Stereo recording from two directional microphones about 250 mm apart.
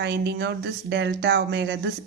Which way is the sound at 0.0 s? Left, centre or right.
Right.